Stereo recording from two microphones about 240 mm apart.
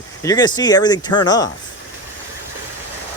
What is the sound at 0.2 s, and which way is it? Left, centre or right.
Speech, centre.